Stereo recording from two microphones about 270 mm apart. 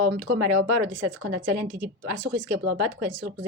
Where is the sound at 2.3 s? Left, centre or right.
Right.